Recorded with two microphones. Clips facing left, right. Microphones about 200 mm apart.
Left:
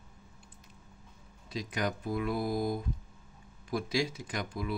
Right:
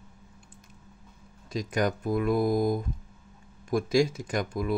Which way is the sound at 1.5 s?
45° right (ahead or behind).